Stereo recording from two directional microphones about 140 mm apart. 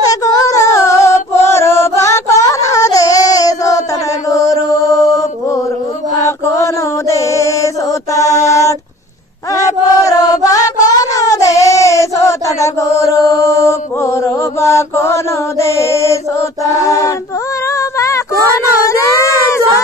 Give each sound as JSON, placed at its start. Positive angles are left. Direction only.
{"t": 0.0, "sound": "music", "side_deg": 25}
{"t": 4.3, "sound": "mantra", "side_deg": 25}
{"t": 8.5, "sound": "a sound", "side_deg": 20}
{"t": 10.0, "sound": "child singing", "side_deg": 25}
{"t": 17.6, "sound": "female singing", "side_deg": 20}
{"t": 18.7, "sound": "a sound", "side_deg": 20}